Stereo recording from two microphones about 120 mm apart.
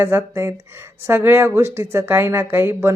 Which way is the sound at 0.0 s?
20° right (ahead or behind).